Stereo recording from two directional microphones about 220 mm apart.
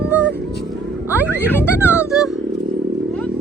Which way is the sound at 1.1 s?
10° right (ahead or behind).